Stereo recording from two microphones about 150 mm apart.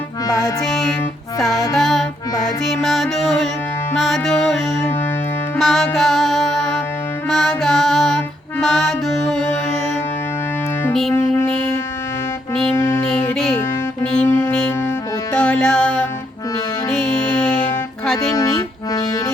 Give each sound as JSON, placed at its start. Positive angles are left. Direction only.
{"t": 0.6, "sound": "music", "side_deg": 0}
{"t": 12.7, "sound": "music", "side_deg": 15}
{"t": 14.0, "sound": "music", "side_deg": 5}
{"t": 18.3, "sound": "music", "side_deg": 25}